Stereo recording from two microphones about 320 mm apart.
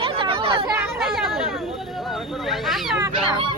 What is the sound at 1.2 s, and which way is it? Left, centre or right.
Speech, centre.